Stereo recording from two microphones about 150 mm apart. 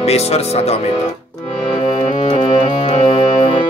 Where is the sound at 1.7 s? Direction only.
35° left (ahead or behind).